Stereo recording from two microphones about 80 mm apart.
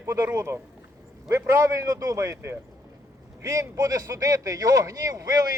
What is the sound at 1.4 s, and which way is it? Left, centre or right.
Speech, right.